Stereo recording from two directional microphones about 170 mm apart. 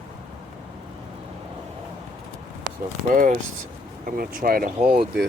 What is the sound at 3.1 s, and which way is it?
Speech, 50° right (ahead or behind).